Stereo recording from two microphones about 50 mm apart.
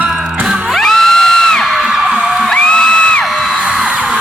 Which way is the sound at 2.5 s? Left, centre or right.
Centre.